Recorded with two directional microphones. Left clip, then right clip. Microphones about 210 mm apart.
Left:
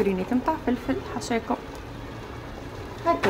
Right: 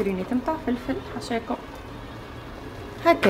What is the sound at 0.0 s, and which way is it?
A woman's voice, 10° left (ahead or behind).